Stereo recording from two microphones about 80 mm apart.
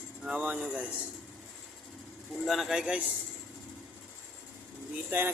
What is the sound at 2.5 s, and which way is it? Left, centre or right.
Speech, centre.